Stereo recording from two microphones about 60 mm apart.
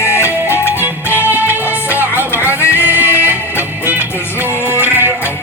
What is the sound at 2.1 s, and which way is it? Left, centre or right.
Music, left.